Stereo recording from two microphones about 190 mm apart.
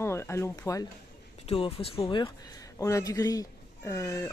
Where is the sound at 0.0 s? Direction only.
15° left (ahead or behind).